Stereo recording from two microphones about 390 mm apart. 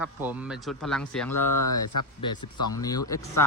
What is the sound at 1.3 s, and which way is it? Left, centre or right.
Speech, left.